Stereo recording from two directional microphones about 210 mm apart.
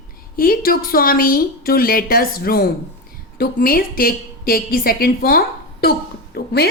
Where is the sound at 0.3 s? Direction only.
45° left (ahead or behind).